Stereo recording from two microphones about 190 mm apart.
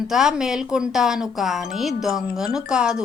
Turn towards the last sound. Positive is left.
turn(degrees=-5)  # may be behind; listen again after turning